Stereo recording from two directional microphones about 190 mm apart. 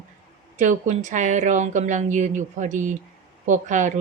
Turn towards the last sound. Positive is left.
turn(degrees=-40)  # may be behind; listen again after turning